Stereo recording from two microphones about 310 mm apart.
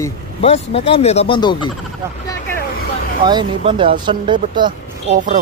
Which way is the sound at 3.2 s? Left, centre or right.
Centre.